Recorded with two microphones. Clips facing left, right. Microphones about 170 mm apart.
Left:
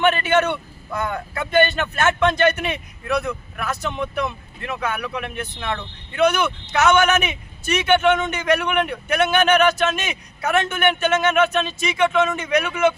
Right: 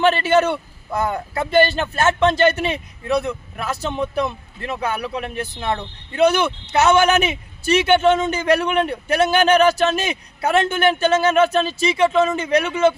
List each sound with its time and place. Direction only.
0.0 s speech: 30° right (ahead or behind)